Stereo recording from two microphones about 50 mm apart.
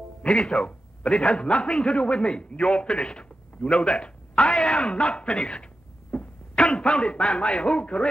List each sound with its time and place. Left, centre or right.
0.7 s a man's voice: centre
6.1 s a sound: centre
7.4 s a man's voice: centre